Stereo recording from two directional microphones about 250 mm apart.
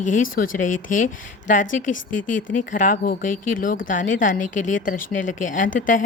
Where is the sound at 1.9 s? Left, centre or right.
Left.